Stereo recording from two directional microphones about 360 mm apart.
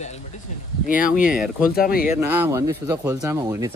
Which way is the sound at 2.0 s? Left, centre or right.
Centre.